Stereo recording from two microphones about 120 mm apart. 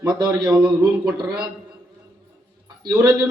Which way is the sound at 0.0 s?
35° right (ahead or behind).